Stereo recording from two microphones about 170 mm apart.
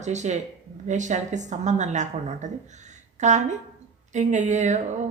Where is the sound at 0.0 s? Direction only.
45° right (ahead or behind).